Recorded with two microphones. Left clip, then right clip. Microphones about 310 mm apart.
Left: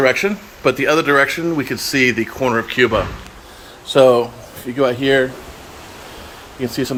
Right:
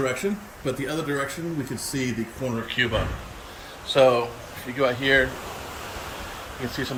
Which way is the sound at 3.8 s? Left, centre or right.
Left.